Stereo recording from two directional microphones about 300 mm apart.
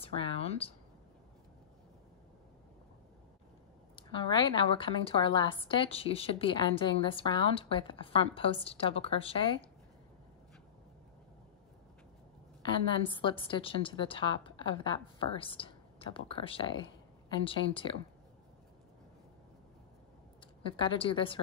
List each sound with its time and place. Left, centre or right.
0.0 s a woman's voice: centre
3.9 s a woman's voice: centre
12.6 s a woman's voice: centre
20.6 s a woman's voice: centre